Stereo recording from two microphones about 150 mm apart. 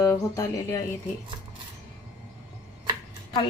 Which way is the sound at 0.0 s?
20° left (ahead or behind).